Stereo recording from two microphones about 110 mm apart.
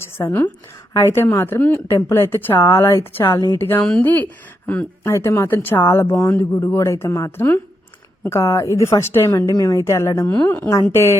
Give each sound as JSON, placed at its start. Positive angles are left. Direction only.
{"t": 0.2, "sound": "a woman's voice", "side_deg": 30}
{"t": 5.0, "sound": "a woman's voice", "side_deg": 25}